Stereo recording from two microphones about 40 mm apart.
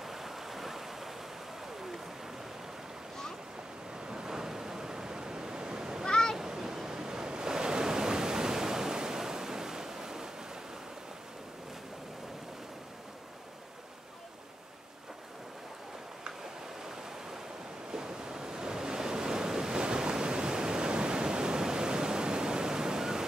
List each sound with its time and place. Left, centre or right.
0.0 s waves: centre
4.1 s waves: centre
6.0 s a sound: centre
6.3 s waves: centre
17.9 s waves: centre